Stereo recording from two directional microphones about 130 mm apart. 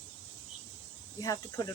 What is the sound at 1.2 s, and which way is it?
Speech, 25° left (ahead or behind).